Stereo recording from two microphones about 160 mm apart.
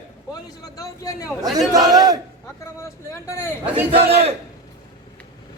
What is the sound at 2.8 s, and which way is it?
Vehicle, 15° left (ahead or behind).